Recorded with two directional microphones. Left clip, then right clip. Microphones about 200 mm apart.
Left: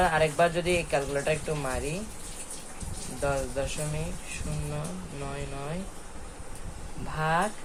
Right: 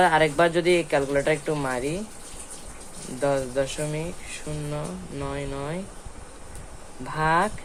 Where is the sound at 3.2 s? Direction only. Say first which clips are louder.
Right 6 dB; 50° right (ahead or behind).